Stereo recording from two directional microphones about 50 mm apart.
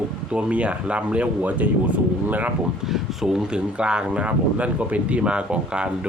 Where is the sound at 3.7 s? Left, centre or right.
Right.